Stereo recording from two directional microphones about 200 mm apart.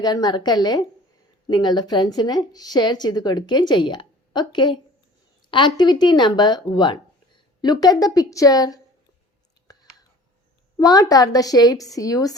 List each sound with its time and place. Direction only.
0.0 s speech: 20° left (ahead or behind)
9.7 s whispering: 20° left (ahead or behind)
10.8 s a woman's voice: 20° left (ahead or behind)